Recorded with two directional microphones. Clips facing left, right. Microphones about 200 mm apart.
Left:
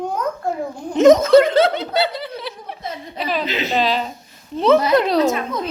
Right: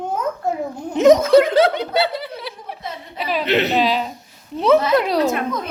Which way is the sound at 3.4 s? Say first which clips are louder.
Right 6 dB; 65° right (ahead or behind).